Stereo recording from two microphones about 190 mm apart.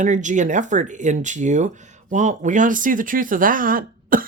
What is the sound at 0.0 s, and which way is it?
Speech, 40° right (ahead or behind).